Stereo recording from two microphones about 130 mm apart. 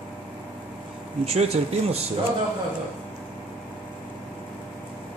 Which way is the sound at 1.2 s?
50° right (ahead or behind).